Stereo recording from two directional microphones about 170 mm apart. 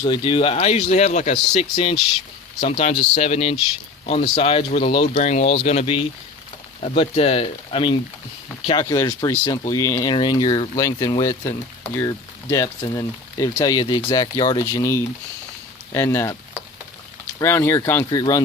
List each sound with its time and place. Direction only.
0.0 s speech: 30° left (ahead or behind)
12.6 s speech: 30° left (ahead or behind)
13.0 s speech: 20° left (ahead or behind)
17.4 s speech: 15° left (ahead or behind)